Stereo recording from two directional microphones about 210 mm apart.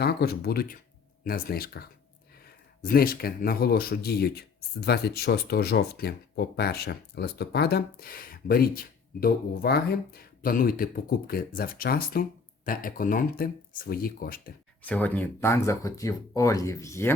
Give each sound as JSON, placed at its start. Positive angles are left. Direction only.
{"t": 0.0, "sound": "speech", "side_deg": 50}
{"t": 14.8, "sound": "speech", "side_deg": 5}